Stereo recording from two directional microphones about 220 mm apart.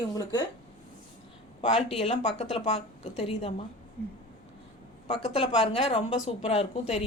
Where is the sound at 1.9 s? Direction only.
25° left (ahead or behind).